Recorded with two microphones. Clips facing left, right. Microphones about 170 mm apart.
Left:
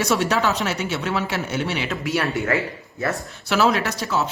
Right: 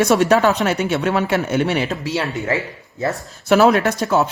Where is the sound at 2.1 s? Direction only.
20° right (ahead or behind).